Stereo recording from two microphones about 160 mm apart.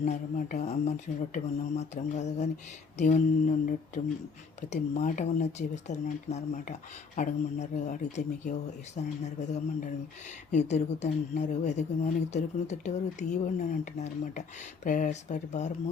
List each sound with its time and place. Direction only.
0.0 s speech: 55° left (ahead or behind)